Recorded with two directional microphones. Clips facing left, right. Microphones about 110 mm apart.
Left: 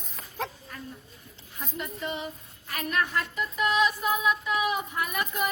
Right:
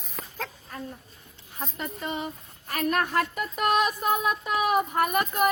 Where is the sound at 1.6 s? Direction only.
35° right (ahead or behind).